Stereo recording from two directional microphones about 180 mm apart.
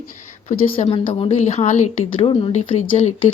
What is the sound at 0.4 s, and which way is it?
Speech, 35° left (ahead or behind).